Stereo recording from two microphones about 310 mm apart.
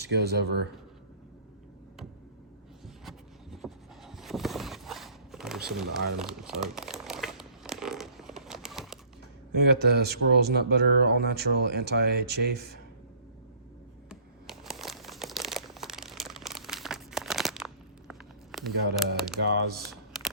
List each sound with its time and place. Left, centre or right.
0.1 s speech: right
2.8 s vehicle: centre
5.6 s crumpling: centre
9.6 s speech: right
14.1 s crumpling: centre
18.1 s a sound: centre
19.1 s speech: centre
19.4 s speech: right